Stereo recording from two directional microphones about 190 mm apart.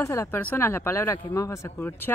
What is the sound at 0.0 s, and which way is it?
Speech, 15° left (ahead or behind).